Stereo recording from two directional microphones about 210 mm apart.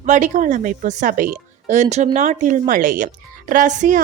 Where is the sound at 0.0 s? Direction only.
35° right (ahead or behind).